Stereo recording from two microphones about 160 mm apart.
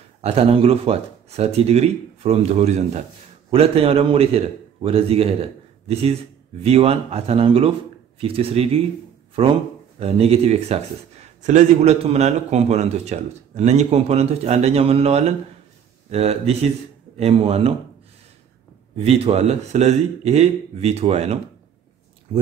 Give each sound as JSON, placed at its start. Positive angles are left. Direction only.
{"t": 0.2, "sound": "speech", "side_deg": -40}
{"t": 9.9, "sound": "speech", "side_deg": -40}
{"t": 18.9, "sound": "speech", "side_deg": -40}